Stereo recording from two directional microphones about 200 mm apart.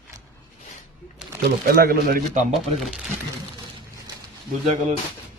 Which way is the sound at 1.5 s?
50° right (ahead or behind).